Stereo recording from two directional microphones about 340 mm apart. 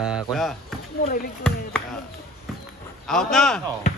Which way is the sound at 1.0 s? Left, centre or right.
Left.